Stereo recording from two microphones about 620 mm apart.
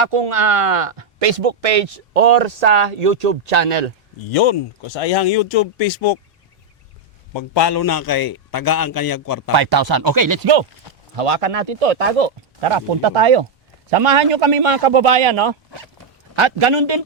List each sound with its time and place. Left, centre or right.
0.0 s speech: right
4.2 s speech: left
7.3 s a man's voice: left
9.5 s speech: right
11.2 s speech: right